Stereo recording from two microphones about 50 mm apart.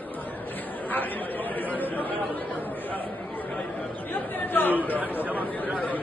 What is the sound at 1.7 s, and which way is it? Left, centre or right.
Chatter, left.